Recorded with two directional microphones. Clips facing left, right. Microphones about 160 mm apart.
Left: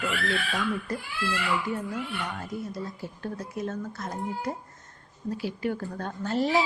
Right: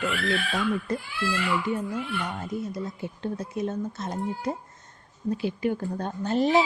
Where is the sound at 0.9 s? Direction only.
20° right (ahead or behind).